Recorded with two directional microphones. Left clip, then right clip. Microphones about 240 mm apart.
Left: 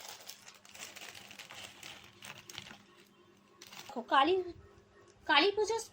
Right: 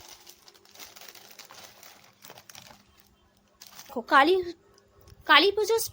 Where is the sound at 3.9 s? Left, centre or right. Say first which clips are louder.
Right 8 dB; right.